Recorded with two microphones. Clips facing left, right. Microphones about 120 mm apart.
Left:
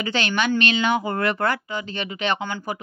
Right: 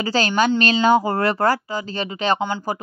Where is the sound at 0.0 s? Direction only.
35° right (ahead or behind).